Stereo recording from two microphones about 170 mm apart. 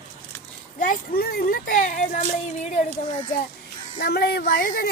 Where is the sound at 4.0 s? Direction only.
70° left (ahead or behind).